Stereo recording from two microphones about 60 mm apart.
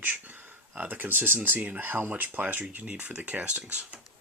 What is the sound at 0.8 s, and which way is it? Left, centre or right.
Speech, right.